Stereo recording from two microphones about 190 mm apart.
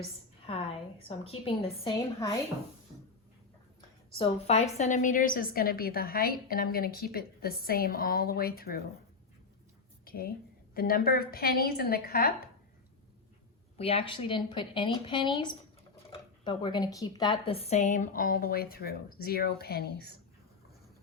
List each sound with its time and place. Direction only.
0.4 s a woman's voice: 30° left (ahead or behind)
4.2 s a woman's voice: 35° left (ahead or behind); by 8.8 s 55° left (ahead or behind)
10.1 s a sound: 50° left (ahead or behind)
10.8 s a woman's voice: 50° left (ahead or behind)
13.7 s a woman's voice: 30° left (ahead or behind); by 20.1 s 55° left (ahead or behind)